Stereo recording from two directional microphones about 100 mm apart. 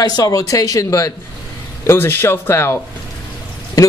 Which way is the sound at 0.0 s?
40° left (ahead or behind).